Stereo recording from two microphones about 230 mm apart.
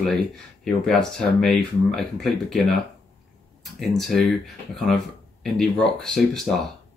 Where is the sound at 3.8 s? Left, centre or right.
Centre.